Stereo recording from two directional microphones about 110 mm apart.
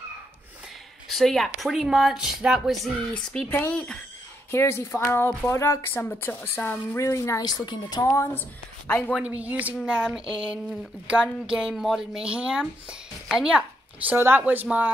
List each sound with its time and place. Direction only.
1.0 s speech: centre (ahead or behind)
3.4 s a woman's voice: 20° left (ahead or behind)
3.7 s speech: 10° left (ahead or behind)
4.5 s a woman's voice: 25° left (ahead or behind)
7.4 s a woman's voice: 40° left (ahead or behind)
8.2 s a woman's voice: 20° left (ahead or behind)
9.1 s speech: 10° right (ahead or behind)